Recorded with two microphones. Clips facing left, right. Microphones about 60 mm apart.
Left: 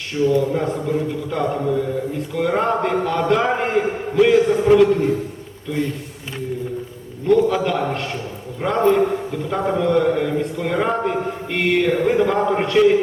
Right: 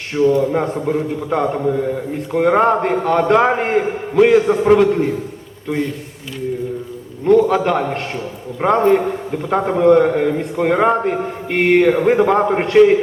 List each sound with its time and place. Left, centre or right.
0.1 s a man's voice: right
7.3 s a man's voice: right